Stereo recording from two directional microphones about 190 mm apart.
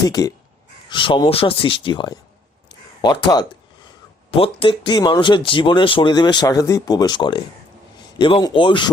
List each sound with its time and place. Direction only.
0.1 s speech: 20° left (ahead or behind)